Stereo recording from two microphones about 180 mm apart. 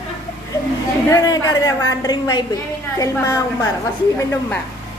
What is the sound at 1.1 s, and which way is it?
A woman's voice, 20° left (ahead or behind).